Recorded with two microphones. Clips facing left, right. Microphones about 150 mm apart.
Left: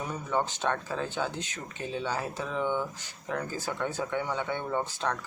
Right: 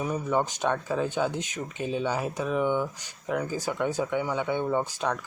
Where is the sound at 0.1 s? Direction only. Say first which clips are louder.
Right 2 dB; 10° right (ahead or behind).